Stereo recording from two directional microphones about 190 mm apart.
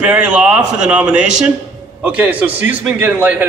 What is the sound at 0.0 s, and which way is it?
A man's voice, 5° right (ahead or behind).